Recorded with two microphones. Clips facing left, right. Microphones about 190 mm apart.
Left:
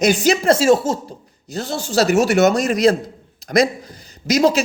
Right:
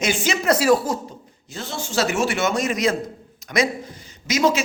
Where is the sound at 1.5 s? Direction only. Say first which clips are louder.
Left 6 dB; 40° left (ahead or behind).